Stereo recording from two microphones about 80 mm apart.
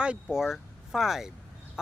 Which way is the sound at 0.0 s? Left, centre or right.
Centre.